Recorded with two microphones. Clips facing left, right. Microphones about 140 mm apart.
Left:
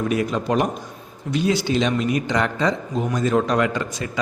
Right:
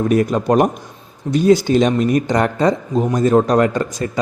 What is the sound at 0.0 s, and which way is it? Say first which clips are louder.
A man's voice: right 6 dB; 45° right (ahead or behind).